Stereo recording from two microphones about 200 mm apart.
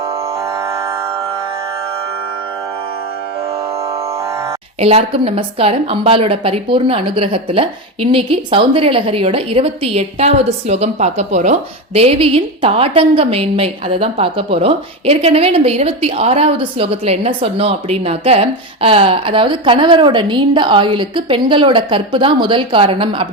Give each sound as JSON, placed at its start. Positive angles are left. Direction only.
{"t": 4.8, "sound": "a woman's voice", "side_deg": -30}